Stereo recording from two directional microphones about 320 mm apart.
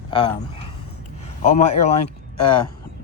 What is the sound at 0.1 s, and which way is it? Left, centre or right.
Speech, centre.